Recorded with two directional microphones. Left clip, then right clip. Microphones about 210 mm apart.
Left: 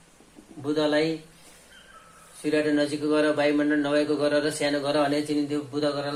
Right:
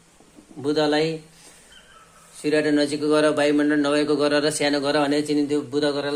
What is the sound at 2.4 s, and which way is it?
A man's voice, 55° right (ahead or behind).